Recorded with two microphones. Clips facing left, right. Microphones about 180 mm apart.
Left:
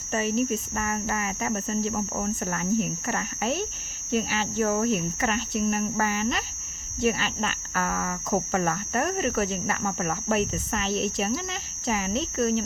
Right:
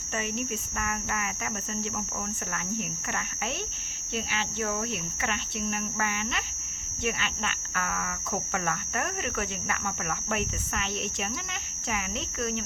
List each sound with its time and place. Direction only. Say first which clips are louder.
0.1 s speech: left 7 dB; 35° left (ahead or behind)